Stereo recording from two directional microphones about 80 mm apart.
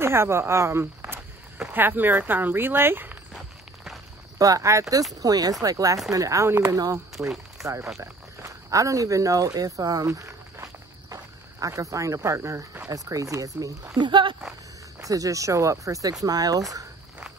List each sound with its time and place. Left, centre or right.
0.0 s speech: right
4.4 s speech: right
6.7 s speech: right
11.6 s speech: right
13.9 s speech: right
15.0 s speech: right